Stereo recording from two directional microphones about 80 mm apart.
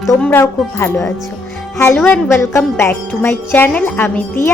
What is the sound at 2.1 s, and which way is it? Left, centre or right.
Speech, left.